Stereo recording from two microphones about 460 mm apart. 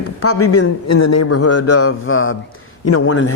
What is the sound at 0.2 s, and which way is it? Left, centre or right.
A man's voice, left.